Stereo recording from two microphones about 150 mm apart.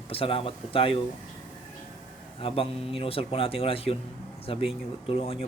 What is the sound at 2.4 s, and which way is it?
Speech, 40° left (ahead or behind).